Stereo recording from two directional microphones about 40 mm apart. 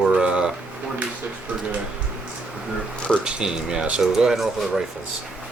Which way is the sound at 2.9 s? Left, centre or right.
Left.